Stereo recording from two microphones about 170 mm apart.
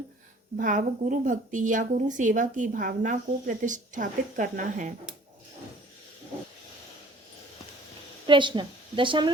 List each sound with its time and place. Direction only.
0.5 s a woman's voice: 50° right (ahead or behind)
8.3 s a woman's voice: 30° right (ahead or behind)